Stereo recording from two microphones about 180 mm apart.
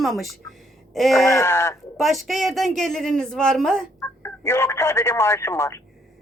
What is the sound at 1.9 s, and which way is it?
Speech, centre (ahead or behind).